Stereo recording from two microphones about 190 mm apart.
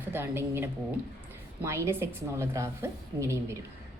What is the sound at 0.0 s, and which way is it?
A woman's voice, 10° right (ahead or behind).